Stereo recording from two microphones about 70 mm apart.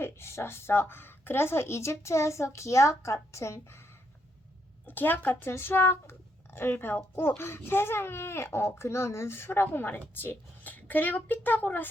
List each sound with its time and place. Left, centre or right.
0.0 s speech: left
4.9 s a woman's voice: left